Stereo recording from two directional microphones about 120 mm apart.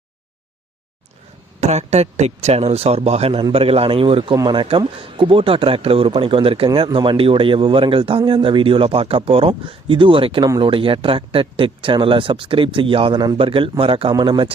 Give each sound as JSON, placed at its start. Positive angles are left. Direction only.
{"t": 1.6, "sound": "speech", "side_deg": -65}